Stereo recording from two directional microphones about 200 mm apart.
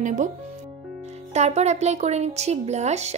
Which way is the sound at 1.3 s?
35° right (ahead or behind).